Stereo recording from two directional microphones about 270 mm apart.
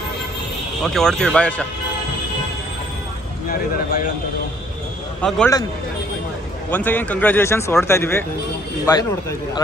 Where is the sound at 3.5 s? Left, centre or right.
Left.